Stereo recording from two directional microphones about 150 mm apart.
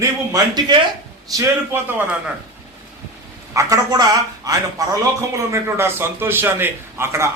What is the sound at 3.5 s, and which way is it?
A man's voice, 25° right (ahead or behind).